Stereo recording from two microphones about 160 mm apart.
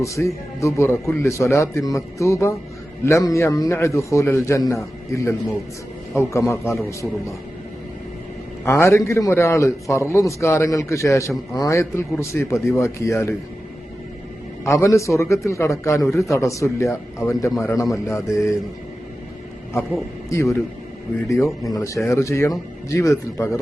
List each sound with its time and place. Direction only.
0.0 s speech: 20° left (ahead or behind)
6.5 s speech: 20° left (ahead or behind)
8.6 s a man's voice: 15° left (ahead or behind)
14.6 s a man's voice: 20° left (ahead or behind)
20.3 s a man's voice: 20° left (ahead or behind)